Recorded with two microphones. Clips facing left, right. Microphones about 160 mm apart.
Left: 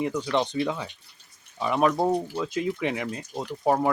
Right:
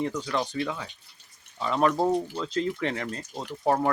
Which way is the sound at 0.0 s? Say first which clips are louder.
Left 3 dB; 10° left (ahead or behind).